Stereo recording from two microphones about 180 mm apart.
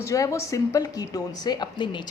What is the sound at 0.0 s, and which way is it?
Speech, 15° left (ahead or behind).